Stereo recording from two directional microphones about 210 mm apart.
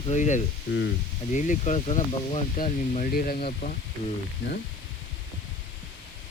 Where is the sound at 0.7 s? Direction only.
45° left (ahead or behind).